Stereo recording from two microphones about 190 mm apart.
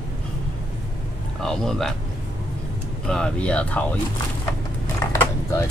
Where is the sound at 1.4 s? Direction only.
Centre (ahead or behind).